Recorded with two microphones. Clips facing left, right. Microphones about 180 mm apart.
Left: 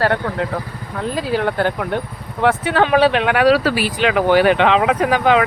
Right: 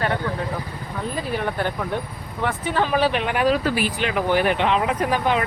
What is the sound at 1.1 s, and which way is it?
Speech, 90° left.